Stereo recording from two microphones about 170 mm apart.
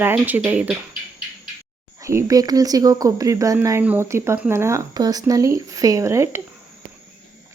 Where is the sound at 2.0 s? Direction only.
15° right (ahead or behind).